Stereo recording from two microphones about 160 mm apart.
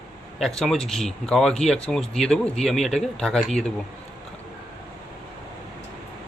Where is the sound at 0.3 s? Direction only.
Centre (ahead or behind).